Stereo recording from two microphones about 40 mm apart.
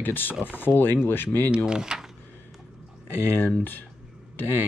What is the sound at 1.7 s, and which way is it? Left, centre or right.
Speech, centre.